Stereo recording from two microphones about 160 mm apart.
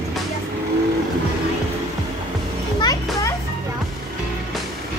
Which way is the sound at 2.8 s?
20° left (ahead or behind).